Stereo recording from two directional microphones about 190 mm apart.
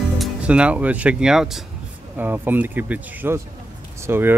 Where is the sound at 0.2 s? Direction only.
5° right (ahead or behind).